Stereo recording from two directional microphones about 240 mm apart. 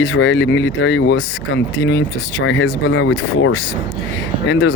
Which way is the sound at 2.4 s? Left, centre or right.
Left.